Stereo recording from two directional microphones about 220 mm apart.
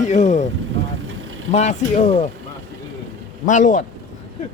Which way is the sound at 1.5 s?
30° left (ahead or behind).